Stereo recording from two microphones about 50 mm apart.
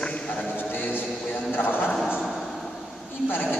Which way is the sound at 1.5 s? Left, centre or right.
Left.